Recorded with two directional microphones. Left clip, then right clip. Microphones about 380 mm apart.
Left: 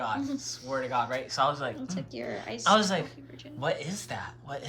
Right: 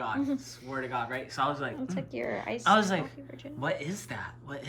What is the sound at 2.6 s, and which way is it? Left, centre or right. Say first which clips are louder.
Speech: left 1 dB; centre.